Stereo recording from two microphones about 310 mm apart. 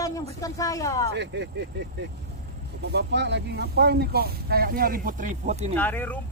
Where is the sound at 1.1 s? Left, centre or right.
Right.